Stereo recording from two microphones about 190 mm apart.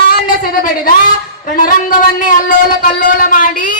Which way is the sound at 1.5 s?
45° left (ahead or behind).